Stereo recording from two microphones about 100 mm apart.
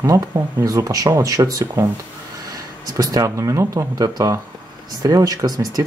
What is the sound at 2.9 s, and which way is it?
Speech, 35° right (ahead or behind).